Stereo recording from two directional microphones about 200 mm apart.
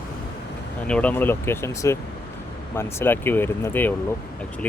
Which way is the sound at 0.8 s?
5° left (ahead or behind).